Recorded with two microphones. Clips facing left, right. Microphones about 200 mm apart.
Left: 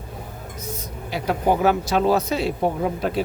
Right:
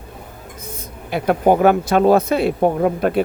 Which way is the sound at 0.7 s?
55° right (ahead or behind).